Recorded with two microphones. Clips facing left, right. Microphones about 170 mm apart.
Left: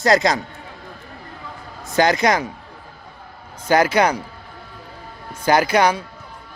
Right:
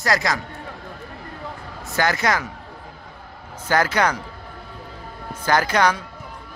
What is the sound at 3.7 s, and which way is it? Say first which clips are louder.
Speech: left 4 dB; 10° left (ahead or behind).